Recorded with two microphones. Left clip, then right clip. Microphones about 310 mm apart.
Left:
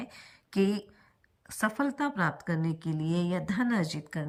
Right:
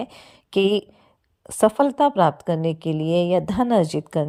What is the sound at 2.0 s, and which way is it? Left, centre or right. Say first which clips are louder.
A woman's voice: right 13 dB; centre.